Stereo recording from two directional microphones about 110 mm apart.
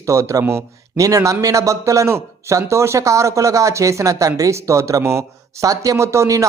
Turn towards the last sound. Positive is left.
turn(degrees=-30)  # may be behind; listen again after turning